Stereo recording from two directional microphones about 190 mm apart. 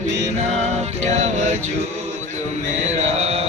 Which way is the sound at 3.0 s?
35° right (ahead or behind).